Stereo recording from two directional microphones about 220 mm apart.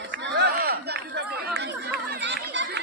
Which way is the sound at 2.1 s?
50° right (ahead or behind).